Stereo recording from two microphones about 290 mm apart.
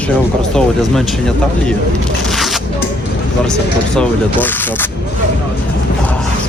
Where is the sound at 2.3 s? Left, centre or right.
Centre.